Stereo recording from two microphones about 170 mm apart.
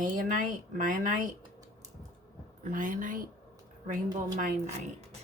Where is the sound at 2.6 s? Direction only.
50° right (ahead or behind).